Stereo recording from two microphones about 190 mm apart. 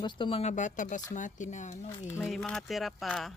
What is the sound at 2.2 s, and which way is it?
Speech, 5° left (ahead or behind).